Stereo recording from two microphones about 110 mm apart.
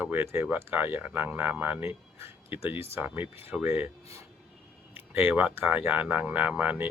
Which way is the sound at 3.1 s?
20° right (ahead or behind).